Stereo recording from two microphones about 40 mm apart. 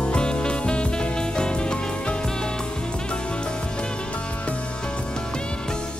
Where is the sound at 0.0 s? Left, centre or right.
Left.